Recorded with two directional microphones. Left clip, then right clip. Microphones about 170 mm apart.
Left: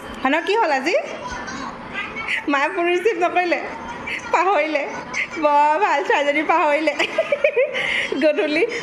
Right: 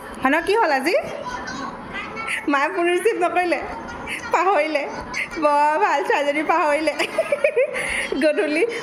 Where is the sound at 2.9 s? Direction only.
55° left (ahead or behind).